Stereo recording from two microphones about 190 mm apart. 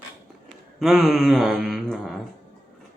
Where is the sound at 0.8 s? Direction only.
Centre (ahead or behind).